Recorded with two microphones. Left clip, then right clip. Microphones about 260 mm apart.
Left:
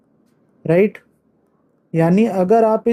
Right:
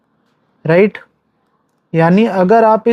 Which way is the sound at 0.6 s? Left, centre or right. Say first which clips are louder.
Right 4 dB; right.